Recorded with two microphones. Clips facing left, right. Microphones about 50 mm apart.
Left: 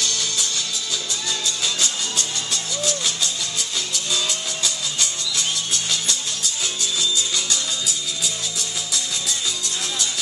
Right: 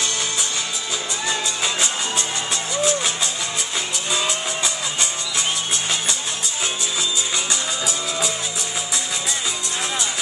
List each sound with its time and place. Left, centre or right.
1.6 s music: right
4.1 s music: right
6.8 s music: right